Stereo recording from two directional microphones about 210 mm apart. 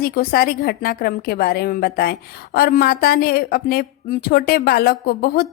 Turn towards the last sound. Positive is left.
turn(degrees=45)  # may be behind; listen again after turning